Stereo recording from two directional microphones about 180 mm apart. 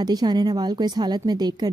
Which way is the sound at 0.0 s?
20° right (ahead or behind).